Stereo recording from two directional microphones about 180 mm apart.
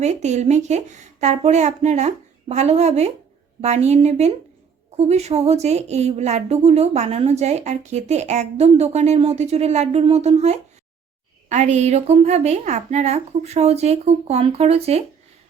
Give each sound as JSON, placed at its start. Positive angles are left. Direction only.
{"t": 0.0, "sound": "speech", "side_deg": -40}